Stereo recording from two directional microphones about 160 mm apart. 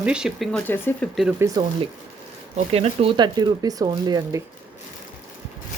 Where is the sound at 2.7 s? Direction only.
40° right (ahead or behind); by 4.4 s 20° right (ahead or behind).